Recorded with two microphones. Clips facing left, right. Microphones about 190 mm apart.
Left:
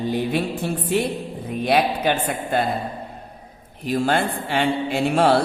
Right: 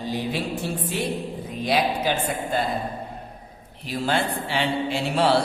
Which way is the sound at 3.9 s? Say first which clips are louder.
Left 4 dB; 50° left (ahead or behind).